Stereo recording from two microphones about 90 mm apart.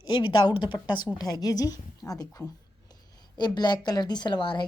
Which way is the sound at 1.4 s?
45° left (ahead or behind).